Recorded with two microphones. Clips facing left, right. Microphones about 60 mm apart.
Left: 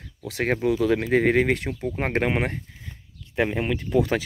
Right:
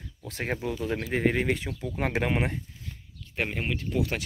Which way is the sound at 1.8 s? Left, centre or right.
Left.